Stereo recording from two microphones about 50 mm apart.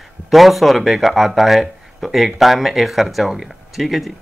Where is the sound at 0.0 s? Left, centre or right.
Centre.